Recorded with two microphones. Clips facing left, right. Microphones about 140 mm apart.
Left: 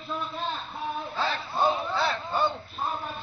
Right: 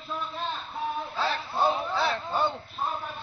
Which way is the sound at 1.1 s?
5° right (ahead or behind).